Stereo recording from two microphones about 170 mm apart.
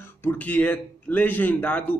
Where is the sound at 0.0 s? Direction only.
10° left (ahead or behind).